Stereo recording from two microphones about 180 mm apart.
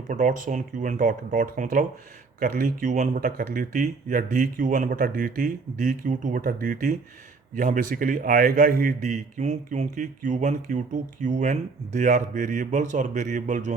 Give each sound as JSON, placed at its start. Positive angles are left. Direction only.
{"t": 0.1, "sound": "a man's voice", "side_deg": -45}